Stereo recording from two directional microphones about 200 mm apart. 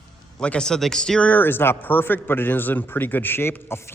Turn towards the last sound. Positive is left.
turn(degrees=10)  # may be behind; listen again after turning